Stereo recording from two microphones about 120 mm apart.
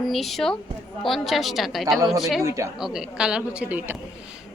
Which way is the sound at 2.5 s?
25° right (ahead or behind).